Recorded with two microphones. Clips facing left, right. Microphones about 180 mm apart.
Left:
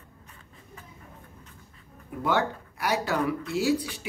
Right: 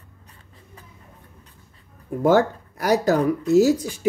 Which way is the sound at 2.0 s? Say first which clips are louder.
Right 9 dB; 40° right (ahead or behind).